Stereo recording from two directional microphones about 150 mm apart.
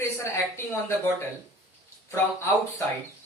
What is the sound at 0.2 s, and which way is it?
Speech, 15° left (ahead or behind).